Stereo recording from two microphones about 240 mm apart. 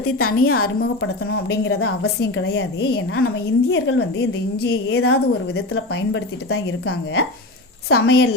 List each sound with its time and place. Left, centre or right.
0.2 s a woman's voice: left
0.6 s a woman's voice: left
1.7 s a woman's voice: left
2.2 s a woman's voice: left
3.2 s a woman's voice: left